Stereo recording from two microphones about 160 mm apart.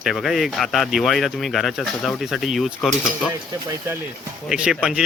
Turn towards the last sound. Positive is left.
turn(degrees=-5)  # may be behind; listen again after turning